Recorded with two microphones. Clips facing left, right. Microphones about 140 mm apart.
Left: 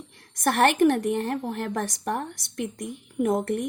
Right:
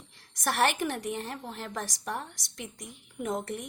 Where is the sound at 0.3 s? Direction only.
55° left (ahead or behind).